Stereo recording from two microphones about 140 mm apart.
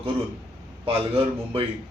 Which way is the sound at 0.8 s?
40° right (ahead or behind).